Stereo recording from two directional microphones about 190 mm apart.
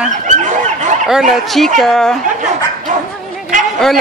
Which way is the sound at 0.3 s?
40° right (ahead or behind).